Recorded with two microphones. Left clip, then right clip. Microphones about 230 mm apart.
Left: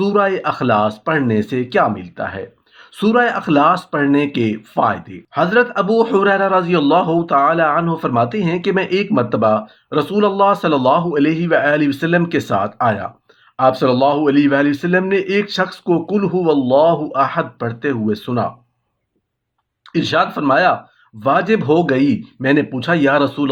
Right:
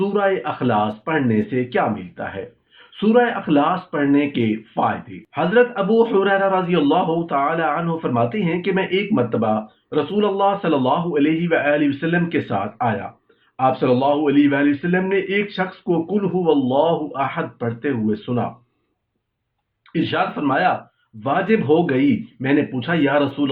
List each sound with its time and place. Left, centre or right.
0.0 s speech: left
19.9 s speech: left